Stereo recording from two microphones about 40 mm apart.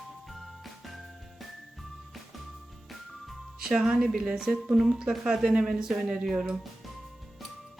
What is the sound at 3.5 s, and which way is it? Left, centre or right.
Speech, centre.